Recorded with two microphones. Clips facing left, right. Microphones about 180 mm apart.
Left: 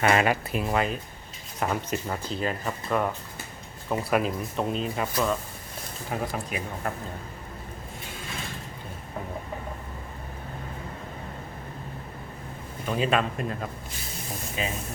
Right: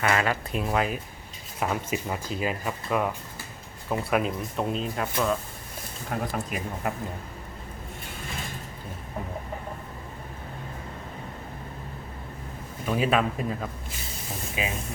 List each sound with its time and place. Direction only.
0.0 s speech: 20° left (ahead or behind)
0.5 s speech: centre (ahead or behind)
6.1 s speech: centre (ahead or behind)
12.9 s speech: 5° right (ahead or behind)